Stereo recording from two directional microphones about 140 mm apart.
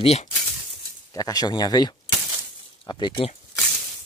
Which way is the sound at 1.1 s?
25° left (ahead or behind).